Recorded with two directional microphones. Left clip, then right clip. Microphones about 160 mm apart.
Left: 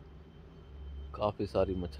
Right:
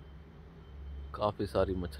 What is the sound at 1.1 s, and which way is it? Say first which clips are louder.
Speech: even; 10° left (ahead or behind).